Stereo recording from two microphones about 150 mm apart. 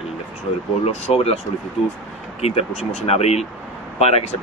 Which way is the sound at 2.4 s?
45° left (ahead or behind).